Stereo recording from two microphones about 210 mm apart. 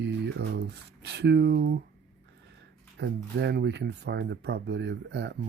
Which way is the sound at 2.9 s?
55° right (ahead or behind).